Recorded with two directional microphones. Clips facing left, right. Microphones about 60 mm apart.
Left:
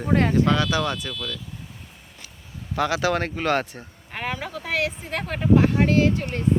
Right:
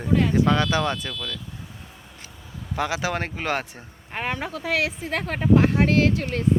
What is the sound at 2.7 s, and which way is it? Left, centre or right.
Speech, centre.